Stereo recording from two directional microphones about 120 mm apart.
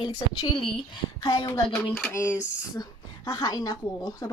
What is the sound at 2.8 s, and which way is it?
A woman's voice, 35° left (ahead or behind).